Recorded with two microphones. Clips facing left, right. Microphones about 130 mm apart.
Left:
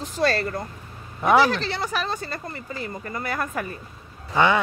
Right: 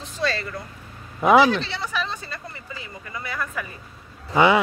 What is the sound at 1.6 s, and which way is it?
Speech, 45° left (ahead or behind).